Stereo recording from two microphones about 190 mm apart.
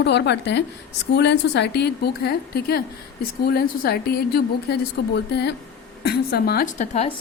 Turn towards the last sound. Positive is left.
turn(degrees=35)  # may be behind; listen again after turning